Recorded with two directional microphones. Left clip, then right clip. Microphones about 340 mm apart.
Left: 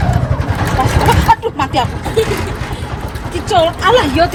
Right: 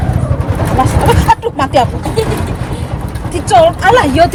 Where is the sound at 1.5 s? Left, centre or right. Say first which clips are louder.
Right 4 dB; right.